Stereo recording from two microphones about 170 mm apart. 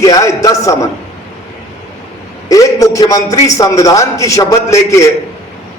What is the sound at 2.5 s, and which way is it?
A man's voice, 20° left (ahead or behind).